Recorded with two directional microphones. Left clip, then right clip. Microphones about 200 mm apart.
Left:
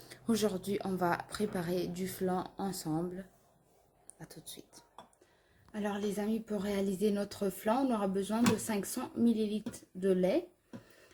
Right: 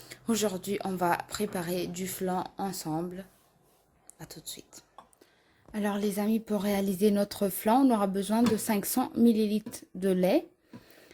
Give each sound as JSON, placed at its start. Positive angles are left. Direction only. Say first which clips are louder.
{"t": 0.0, "sound": "speech", "louder": "right 3 dB", "side_deg": -15}
{"t": 5.7, "sound": "a woman's voice", "louder": "right 5 dB", "side_deg": -45}